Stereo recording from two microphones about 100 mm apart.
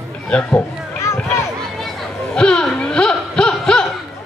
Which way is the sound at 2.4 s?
10° left (ahead or behind).